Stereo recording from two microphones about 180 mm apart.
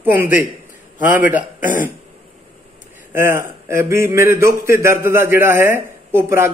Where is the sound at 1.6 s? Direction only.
50° left (ahead or behind).